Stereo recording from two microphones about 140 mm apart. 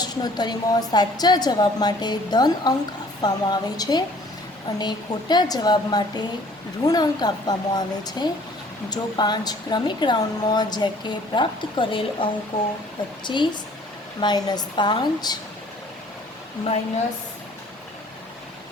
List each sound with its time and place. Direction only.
0.0 s a woman's voice: 30° left (ahead or behind)